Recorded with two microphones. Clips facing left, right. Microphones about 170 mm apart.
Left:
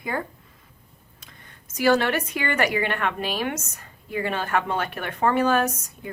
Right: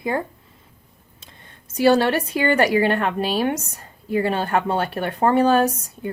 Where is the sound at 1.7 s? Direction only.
30° right (ahead or behind).